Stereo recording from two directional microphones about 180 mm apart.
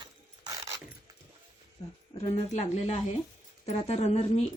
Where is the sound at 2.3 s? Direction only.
40° left (ahead or behind).